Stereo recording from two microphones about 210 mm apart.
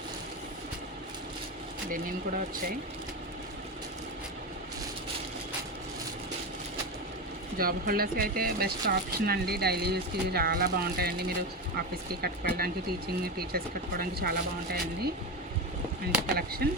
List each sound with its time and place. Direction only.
7.6 s speech: 45° right (ahead or behind)
16.3 s speech: 45° right (ahead or behind)